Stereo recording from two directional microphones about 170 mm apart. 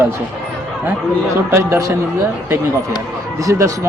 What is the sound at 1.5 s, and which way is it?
Speech, 15° right (ahead or behind).